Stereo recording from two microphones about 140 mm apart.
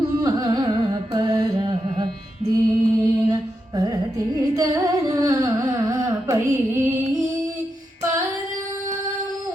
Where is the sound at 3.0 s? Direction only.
30° right (ahead or behind).